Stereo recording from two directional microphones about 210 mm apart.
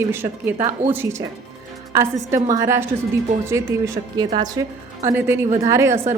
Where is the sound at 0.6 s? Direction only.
35° right (ahead or behind).